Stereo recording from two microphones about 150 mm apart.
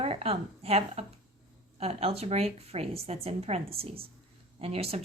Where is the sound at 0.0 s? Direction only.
40° right (ahead or behind).